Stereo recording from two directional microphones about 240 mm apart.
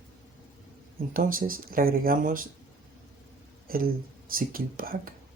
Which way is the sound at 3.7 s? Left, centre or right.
Right.